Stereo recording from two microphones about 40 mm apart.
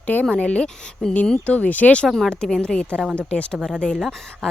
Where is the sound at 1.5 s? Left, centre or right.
Left.